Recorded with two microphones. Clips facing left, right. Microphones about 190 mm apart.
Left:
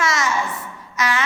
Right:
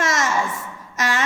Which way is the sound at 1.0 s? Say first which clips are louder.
Left 1 dB; 45° right (ahead or behind).